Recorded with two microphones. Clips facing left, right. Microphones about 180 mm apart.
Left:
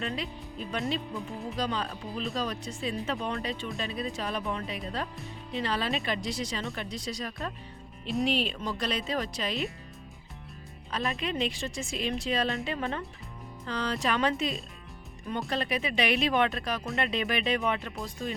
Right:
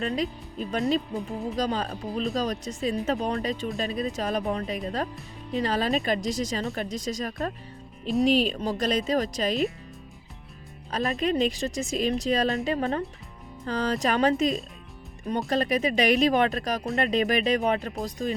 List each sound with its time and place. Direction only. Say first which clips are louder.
0.0 s speech: right 6 dB; 40° right (ahead or behind)
11.2 s speech: right 7 dB; 45° right (ahead or behind)